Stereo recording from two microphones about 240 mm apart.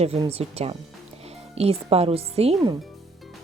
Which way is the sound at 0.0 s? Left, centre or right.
Right.